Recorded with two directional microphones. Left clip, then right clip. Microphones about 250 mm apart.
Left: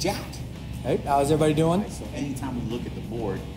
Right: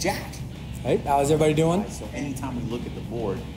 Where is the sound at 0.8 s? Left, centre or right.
Right.